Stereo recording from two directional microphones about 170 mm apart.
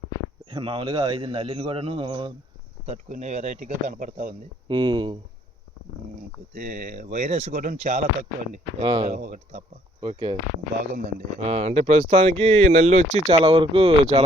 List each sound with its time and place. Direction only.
0.5 s speech: 30° right (ahead or behind)
2.8 s speech: 40° right (ahead or behind)
4.7 s speech: 30° right (ahead or behind)
6.6 s speech: 45° right (ahead or behind)
8.8 s speech: 25° right (ahead or behind)
9.0 s speech: 45° right (ahead or behind)
10.0 s speech: 25° right (ahead or behind)
11.3 s speech: 35° right (ahead or behind)